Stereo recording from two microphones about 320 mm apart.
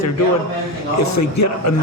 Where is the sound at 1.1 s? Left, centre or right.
Left.